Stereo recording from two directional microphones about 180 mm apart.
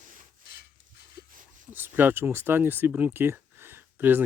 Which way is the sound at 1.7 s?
10° right (ahead or behind).